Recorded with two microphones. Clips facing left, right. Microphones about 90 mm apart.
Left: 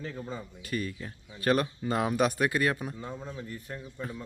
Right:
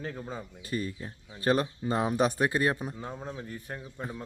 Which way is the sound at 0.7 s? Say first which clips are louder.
Even; 25° right (ahead or behind).